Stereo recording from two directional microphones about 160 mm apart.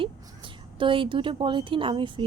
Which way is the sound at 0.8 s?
30° right (ahead or behind).